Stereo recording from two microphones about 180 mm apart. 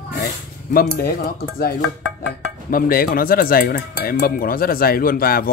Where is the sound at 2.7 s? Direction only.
55° left (ahead or behind).